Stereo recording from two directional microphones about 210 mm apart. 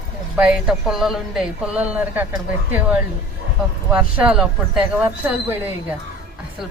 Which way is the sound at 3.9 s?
5° right (ahead or behind).